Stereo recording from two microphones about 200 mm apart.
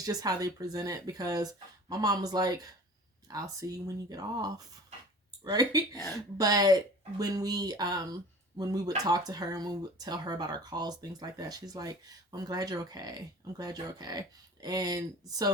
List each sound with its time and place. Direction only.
0.0 s speech: 15° right (ahead or behind)